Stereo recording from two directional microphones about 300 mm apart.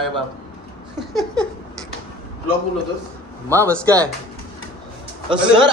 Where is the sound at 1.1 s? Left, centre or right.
Centre.